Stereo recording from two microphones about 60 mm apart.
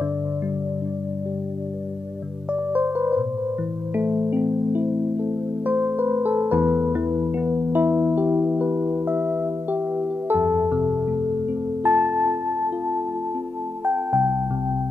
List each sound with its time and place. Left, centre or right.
2.7 s music: right
13.8 s music: right